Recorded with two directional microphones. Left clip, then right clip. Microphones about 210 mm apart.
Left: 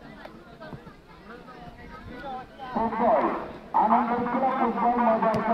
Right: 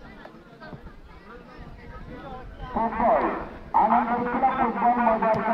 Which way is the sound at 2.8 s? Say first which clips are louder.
Right 1 dB; 25° right (ahead or behind).